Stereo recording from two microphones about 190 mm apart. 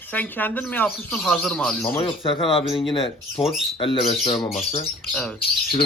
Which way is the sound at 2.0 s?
30° left (ahead or behind).